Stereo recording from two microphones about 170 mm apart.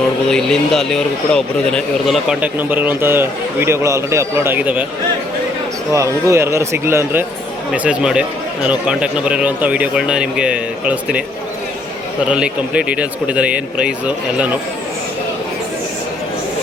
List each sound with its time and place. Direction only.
0.3 s speech: 5° left (ahead or behind)
5.9 s speech: 15° right (ahead or behind)
12.3 s speech: 5° right (ahead or behind)